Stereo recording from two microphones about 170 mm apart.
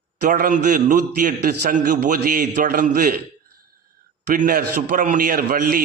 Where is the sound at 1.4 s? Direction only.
65° right (ahead or behind).